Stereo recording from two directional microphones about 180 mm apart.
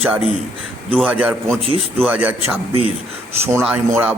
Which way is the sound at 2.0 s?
10° right (ahead or behind).